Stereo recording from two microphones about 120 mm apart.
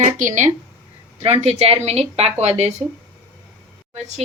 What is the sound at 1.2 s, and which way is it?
A woman's voice, 60° right (ahead or behind).